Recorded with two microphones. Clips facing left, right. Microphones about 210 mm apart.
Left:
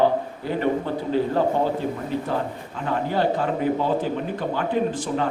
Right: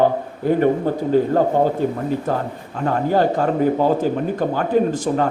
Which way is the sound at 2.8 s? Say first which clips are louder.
Right 5 dB; 45° right (ahead or behind).